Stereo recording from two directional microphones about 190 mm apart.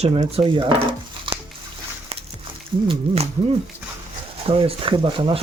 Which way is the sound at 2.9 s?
30° right (ahead or behind).